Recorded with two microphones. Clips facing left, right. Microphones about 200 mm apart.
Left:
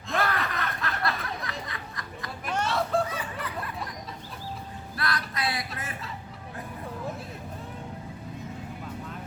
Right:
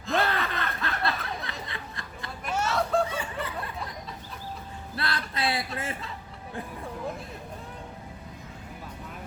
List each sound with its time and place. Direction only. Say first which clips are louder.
0.2 s snicker: left 2 dB; 25° right (ahead or behind)
2.5 s hubbub: right 1 dB; 5° right (ahead or behind)
3.1 s snicker: right 2 dB; 25° right (ahead or behind)
4.9 s a sound: even; 30° right (ahead or behind)